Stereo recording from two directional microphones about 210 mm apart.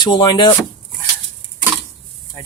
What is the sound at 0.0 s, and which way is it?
Speech, 20° left (ahead or behind).